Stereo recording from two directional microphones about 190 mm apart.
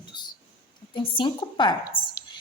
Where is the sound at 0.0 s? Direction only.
25° left (ahead or behind).